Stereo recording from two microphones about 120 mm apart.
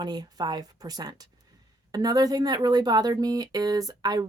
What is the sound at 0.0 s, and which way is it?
Speech, 35° right (ahead or behind).